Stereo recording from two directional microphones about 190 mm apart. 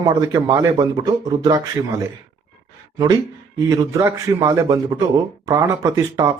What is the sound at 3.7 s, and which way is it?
Speech, 15° right (ahead or behind).